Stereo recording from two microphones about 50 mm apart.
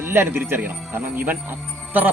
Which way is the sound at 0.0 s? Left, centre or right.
Right.